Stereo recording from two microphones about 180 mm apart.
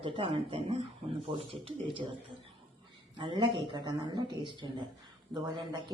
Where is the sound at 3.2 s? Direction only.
30° right (ahead or behind).